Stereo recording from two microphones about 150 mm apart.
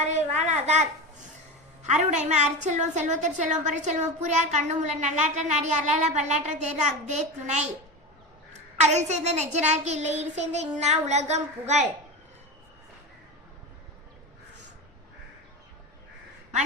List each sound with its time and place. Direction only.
0.0 s a child's voice: 50° right (ahead or behind)